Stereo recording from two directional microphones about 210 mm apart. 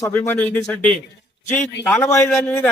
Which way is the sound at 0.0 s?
10° left (ahead or behind).